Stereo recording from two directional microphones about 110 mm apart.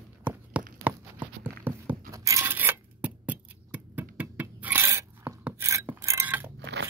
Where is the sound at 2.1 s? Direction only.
30° right (ahead or behind).